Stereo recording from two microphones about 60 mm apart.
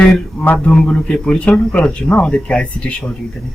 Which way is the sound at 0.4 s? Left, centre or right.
Left.